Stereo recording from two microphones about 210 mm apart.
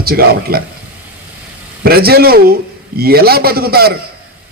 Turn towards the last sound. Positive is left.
turn(degrees=-45)  # may be behind; listen again after turning